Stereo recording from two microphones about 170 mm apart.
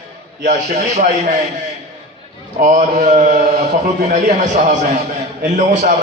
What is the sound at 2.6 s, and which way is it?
A man's voice, 45° right (ahead or behind).